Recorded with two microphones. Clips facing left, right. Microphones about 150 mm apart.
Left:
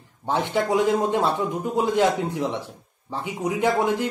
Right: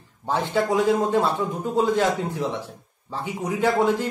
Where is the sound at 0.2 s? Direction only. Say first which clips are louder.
Even; 20° left (ahead or behind).